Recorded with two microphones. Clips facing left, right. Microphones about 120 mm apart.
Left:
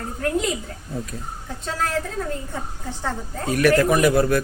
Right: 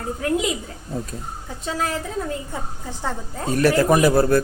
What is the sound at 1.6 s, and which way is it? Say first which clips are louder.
Speech: right 1 dB; 10° right (ahead or behind).